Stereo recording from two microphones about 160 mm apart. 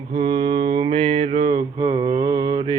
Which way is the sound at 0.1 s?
30° right (ahead or behind).